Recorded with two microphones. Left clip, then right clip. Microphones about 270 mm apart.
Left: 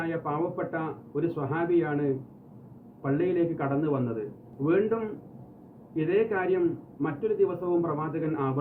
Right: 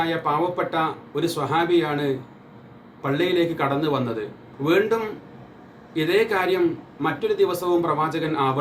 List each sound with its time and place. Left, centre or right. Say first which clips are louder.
0.0 s speech: right 8 dB; centre